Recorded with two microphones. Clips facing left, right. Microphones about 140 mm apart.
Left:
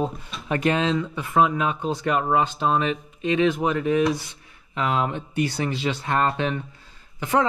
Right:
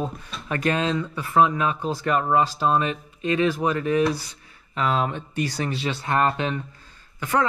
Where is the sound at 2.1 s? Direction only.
15° left (ahead or behind).